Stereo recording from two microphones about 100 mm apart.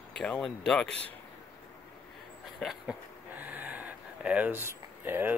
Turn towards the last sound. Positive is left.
turn(degrees=-20)  # may be behind; listen again after turning